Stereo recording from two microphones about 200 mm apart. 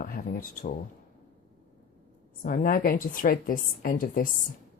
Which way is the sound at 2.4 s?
45° left (ahead or behind).